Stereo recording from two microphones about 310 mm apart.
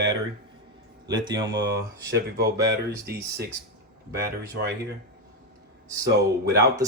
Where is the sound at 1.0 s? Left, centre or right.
Centre.